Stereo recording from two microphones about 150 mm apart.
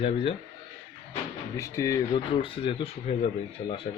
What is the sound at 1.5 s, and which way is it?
Speech, 20° left (ahead or behind).